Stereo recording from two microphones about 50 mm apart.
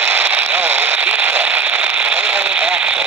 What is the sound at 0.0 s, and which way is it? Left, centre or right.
Radio, right.